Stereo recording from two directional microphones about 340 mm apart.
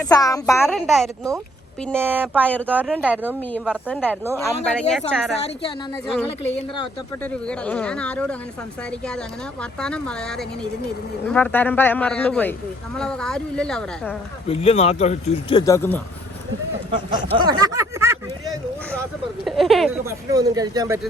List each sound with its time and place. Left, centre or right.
0.0 s speech: centre
7.3 s speech: centre
9.6 s speech: centre
14.4 s speech: centre
16.9 s speech: centre
20.3 s speech: centre